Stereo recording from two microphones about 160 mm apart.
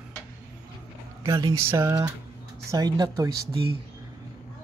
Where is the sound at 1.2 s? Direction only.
20° right (ahead or behind).